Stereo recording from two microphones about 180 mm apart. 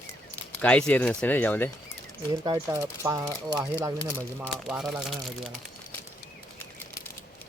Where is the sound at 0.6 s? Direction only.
5° left (ahead or behind).